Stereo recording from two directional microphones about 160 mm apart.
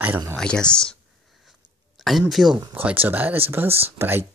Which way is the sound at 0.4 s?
5° left (ahead or behind).